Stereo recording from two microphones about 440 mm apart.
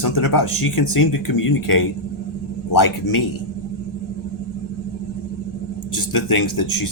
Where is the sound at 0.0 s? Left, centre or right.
Left.